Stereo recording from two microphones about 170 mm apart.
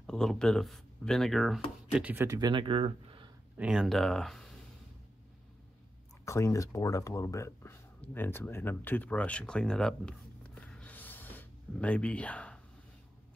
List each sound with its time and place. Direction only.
0.0 s speech: 5° left (ahead or behind); by 3.3 s 30° right (ahead or behind)
3.5 s speech: 5° right (ahead or behind)
6.2 s speech: 15° left (ahead or behind)